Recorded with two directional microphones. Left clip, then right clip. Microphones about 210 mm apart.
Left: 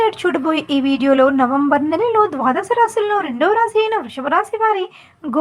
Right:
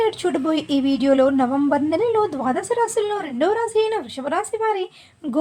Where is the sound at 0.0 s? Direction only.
10° left (ahead or behind).